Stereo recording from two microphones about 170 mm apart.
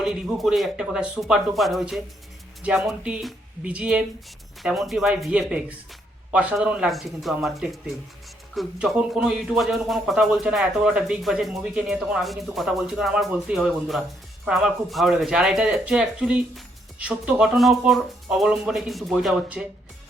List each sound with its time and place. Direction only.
0.0 s speech: centre (ahead or behind)